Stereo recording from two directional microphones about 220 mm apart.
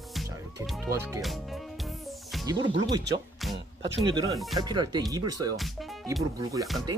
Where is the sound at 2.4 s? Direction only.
20° right (ahead or behind).